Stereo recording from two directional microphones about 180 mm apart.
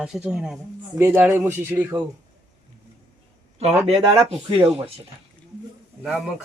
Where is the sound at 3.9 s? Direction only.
35° right (ahead or behind).